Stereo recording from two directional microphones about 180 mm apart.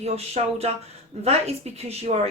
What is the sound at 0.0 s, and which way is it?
Speech, 35° right (ahead or behind).